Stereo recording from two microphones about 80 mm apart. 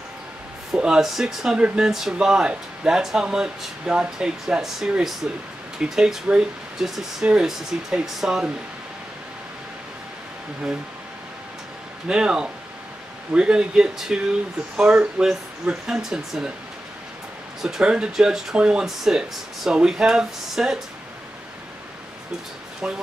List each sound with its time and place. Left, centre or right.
0.7 s speech: centre
12.1 s speech: centre
17.6 s speech: centre